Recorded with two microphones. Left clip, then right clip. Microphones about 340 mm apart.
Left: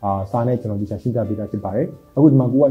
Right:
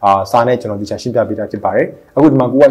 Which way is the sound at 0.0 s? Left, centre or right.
Centre.